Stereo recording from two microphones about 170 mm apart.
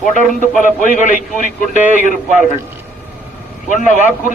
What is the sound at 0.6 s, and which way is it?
Speech, 50° left (ahead or behind).